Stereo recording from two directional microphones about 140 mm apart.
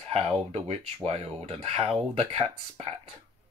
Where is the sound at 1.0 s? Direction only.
45° right (ahead or behind).